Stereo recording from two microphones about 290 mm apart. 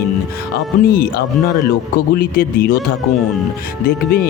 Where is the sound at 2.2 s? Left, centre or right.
Left.